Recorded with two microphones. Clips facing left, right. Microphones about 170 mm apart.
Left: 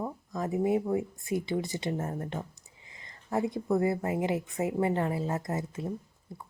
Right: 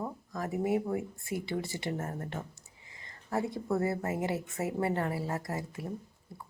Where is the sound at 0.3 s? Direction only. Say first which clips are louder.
Left 3 dB; 20° left (ahead or behind).